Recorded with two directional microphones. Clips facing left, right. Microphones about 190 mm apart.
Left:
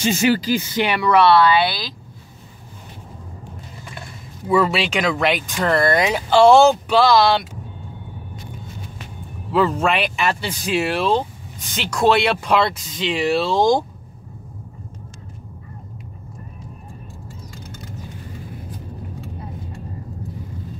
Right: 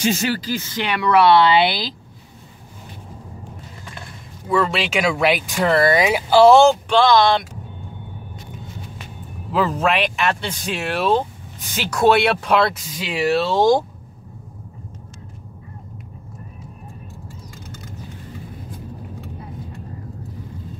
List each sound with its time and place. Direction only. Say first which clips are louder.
0.2 s speech: left 5 dB; 15° left (ahead or behind)
1.2 s speech: right 2 dB; 20° right (ahead or behind)
4.5 s speech: left 2 dB; 5° left (ahead or behind)
9.5 s speech: left 1 dB; centre (ahead or behind)